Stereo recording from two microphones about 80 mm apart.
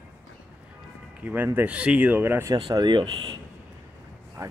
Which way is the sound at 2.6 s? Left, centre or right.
Right.